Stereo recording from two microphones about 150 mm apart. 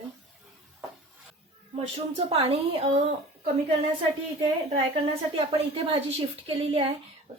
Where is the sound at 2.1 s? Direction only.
40° right (ahead or behind).